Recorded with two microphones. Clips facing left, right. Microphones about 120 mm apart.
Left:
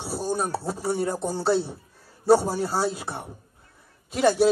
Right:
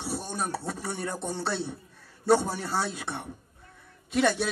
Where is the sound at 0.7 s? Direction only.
30° left (ahead or behind).